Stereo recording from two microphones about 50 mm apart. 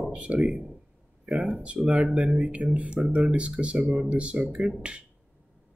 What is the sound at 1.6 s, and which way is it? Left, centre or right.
Speech, right.